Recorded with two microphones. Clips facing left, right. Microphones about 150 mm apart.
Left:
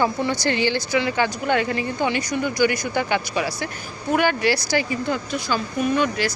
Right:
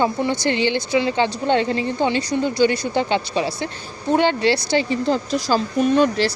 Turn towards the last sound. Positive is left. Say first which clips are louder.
# right 4 dB
turn(degrees=-30)  # may be behind; listen again after turning